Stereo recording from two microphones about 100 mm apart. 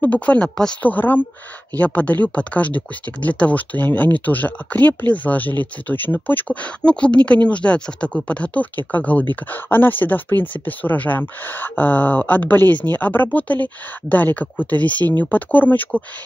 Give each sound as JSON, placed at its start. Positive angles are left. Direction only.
{"t": 0.0, "sound": "speech", "side_deg": 15}